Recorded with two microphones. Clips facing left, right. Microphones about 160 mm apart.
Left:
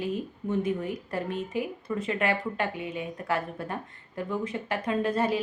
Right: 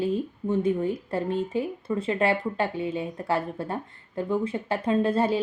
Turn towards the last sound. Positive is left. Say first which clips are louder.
# right 3 dB
turn(degrees=-30)  # may be behind; listen again after turning